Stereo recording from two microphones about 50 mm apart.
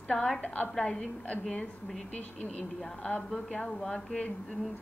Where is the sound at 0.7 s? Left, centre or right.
Centre.